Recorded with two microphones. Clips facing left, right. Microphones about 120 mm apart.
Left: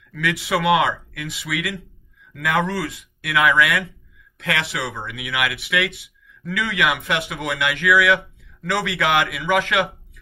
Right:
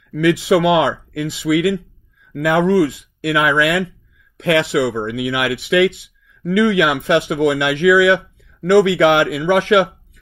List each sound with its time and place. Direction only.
0.1 s speech: 25° right (ahead or behind)